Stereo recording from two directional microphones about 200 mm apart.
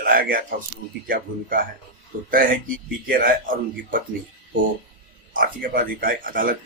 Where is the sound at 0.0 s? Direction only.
45° right (ahead or behind).